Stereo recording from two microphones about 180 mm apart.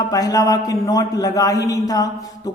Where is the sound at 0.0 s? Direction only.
20° left (ahead or behind).